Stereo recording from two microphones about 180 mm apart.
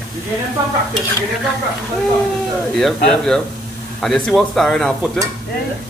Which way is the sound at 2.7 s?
5° left (ahead or behind).